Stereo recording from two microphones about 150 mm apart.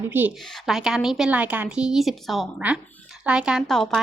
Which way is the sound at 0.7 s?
Centre (ahead or behind).